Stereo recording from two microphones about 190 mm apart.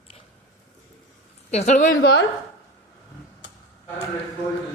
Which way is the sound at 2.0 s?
60° left (ahead or behind).